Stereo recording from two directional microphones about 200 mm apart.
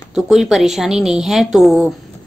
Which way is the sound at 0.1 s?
Centre (ahead or behind).